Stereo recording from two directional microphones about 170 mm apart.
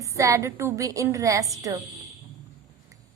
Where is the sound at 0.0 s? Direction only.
20° right (ahead or behind).